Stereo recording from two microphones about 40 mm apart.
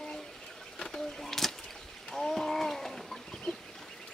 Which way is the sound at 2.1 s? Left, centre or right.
Centre.